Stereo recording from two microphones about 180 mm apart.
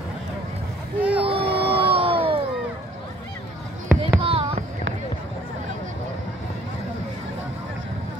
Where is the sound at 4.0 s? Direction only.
30° right (ahead or behind).